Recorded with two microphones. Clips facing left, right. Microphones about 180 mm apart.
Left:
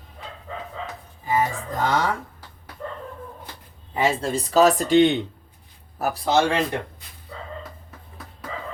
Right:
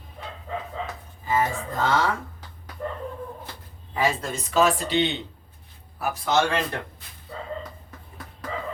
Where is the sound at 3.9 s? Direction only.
25° left (ahead or behind); by 5.1 s 50° left (ahead or behind).